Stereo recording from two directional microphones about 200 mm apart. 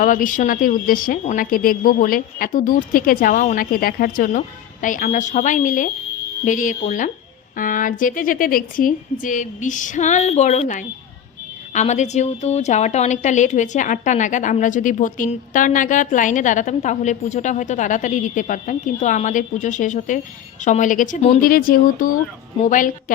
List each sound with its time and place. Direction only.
0.0 s a woman's voice: 40° left (ahead or behind)
21.4 s a woman's voice: 45° left (ahead or behind)